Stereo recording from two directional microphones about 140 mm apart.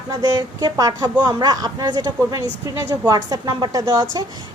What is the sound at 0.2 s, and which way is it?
A woman's voice, 25° right (ahead or behind).